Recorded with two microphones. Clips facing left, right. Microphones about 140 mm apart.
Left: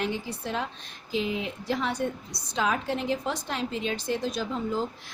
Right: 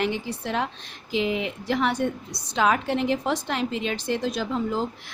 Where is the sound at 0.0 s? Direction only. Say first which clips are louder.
Right 4 dB; 75° right (ahead or behind).